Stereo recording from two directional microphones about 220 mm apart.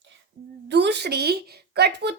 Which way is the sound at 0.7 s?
50° right (ahead or behind).